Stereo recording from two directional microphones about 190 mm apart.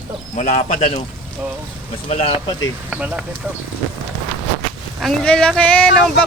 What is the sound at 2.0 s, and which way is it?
Speech, 35° left (ahead or behind).